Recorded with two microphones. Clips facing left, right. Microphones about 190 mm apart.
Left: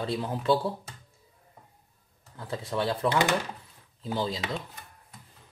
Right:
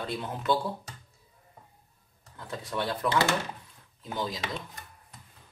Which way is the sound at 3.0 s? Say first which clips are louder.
Even; 15° left (ahead or behind).